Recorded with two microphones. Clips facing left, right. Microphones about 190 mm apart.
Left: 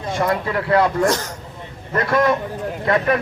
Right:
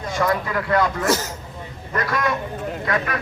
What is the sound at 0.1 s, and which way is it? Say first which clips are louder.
Speech: left 1 dB; 30° left (ahead or behind).